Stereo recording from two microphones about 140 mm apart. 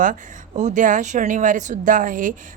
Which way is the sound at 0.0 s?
65° right (ahead or behind).